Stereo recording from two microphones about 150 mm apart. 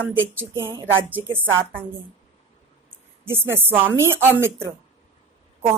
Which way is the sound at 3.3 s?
15° right (ahead or behind).